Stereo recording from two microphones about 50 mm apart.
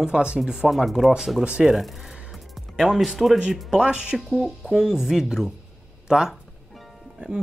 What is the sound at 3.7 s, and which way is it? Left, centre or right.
Speech, centre.